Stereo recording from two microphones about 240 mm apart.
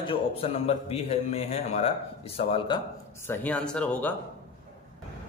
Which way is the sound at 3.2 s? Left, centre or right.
Centre.